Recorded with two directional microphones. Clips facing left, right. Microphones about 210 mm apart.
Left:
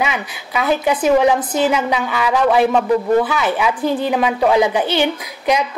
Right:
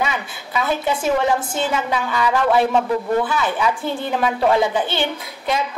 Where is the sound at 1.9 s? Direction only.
20° left (ahead or behind).